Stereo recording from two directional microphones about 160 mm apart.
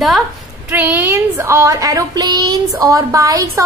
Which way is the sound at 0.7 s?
10° right (ahead or behind).